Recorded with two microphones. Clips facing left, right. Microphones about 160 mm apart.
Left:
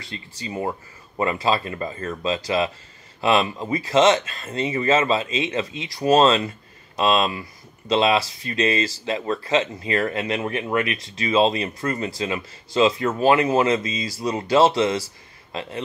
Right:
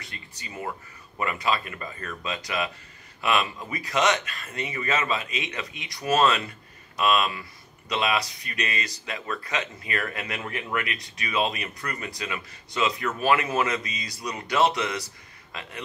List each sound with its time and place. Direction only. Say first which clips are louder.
0.4 s speech: left 7 dB; 30° left (ahead or behind)